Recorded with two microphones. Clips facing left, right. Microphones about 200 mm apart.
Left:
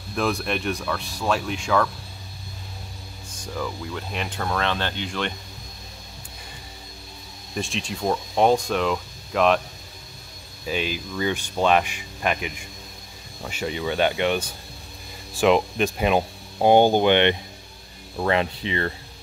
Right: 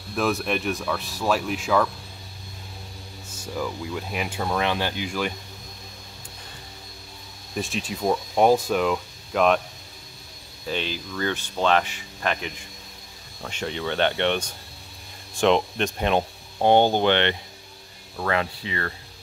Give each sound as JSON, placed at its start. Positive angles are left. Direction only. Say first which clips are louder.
{"t": 0.1, "sound": "speech", "louder": "right 1 dB", "side_deg": 0}
{"t": 3.3, "sound": "speech", "louder": "right 1 dB", "side_deg": -5}
{"t": 7.5, "sound": "speech", "louder": "even", "side_deg": -5}
{"t": 10.7, "sound": "speech", "louder": "left 2 dB", "side_deg": 10}